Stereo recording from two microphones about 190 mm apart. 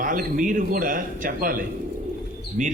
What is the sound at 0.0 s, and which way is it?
A man's voice, 45° right (ahead or behind).